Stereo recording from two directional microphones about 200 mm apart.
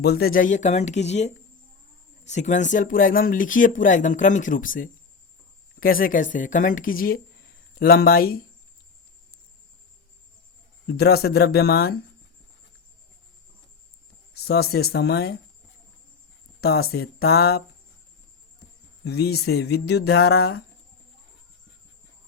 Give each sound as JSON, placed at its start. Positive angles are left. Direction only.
{"t": 0.0, "sound": "a woman's voice", "side_deg": 50}
{"t": 10.8, "sound": "a woman's voice", "side_deg": 55}
{"t": 14.4, "sound": "a woman's voice", "side_deg": 55}
{"t": 16.6, "sound": "a woman's voice", "side_deg": 55}
{"t": 19.0, "sound": "speech", "side_deg": 55}